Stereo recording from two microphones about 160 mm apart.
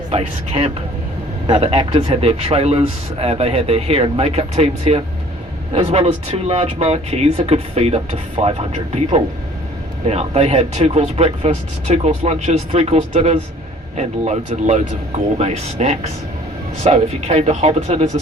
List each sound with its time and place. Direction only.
0.1 s speech: 40° right (ahead or behind)
10.1 s speech: 40° right (ahead or behind)